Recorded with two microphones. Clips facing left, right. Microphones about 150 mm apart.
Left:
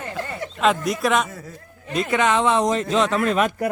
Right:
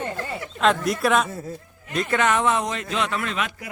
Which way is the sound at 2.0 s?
20° left (ahead or behind).